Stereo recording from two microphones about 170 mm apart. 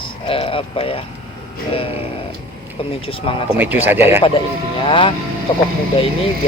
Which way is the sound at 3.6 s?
10° right (ahead or behind).